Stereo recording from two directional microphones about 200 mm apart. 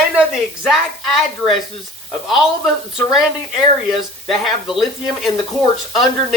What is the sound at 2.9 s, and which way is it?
Speech, centre (ahead or behind).